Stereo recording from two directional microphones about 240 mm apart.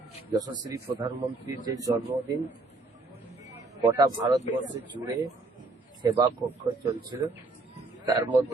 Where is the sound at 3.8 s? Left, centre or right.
Centre.